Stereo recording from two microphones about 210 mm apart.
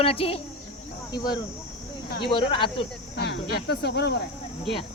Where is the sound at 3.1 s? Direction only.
50° left (ahead or behind).